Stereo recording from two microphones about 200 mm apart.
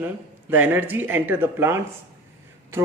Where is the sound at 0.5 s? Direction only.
10° right (ahead or behind).